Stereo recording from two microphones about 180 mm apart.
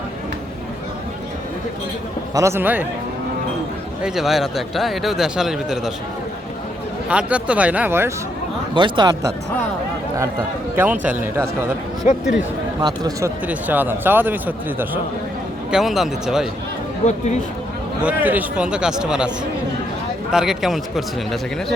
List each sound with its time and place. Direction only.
2.3 s speech: 15° right (ahead or behind)
4.0 s speech: centre (ahead or behind)
7.1 s speech: 5° right (ahead or behind)
8.7 s speech: 25° right (ahead or behind)
10.8 s speech: 10° right (ahead or behind)
12.8 s speech: 20° right (ahead or behind)
13.5 s speech: 10° right (ahead or behind)
17.0 s speech: 40° left (ahead or behind)
18.0 s speech: 10° right (ahead or behind)
20.3 s speech: 5° right (ahead or behind)